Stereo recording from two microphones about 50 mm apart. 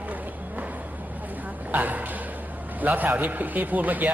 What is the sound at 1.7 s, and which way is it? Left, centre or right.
A man's voice, right.